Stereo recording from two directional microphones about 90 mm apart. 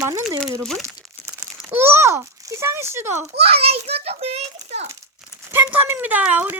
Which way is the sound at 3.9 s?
90° right.